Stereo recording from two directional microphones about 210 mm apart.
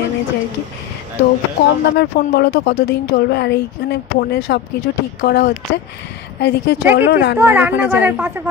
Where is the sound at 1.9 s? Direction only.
50° left (ahead or behind).